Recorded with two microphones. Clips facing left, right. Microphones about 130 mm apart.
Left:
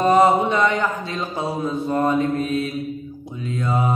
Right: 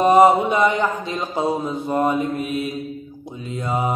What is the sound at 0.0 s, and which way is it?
Mantra, 15° right (ahead or behind).